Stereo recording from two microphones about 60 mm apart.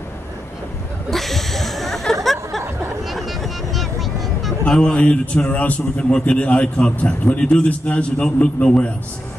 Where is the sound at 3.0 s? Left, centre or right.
Centre.